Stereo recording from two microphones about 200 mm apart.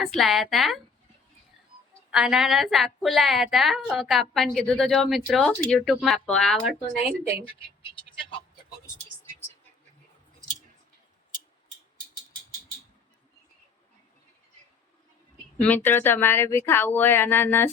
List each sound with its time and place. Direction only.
0.0 s a woman's voice: centre (ahead or behind)
2.0 s a woman's voice: 5° right (ahead or behind)
7.9 s vehicle: 25° left (ahead or behind)
15.5 s speech: 5° left (ahead or behind)